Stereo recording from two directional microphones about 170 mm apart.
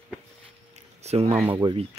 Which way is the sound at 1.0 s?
40° right (ahead or behind).